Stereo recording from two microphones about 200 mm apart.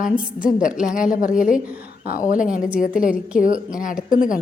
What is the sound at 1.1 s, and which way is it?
Speech, 40° left (ahead or behind).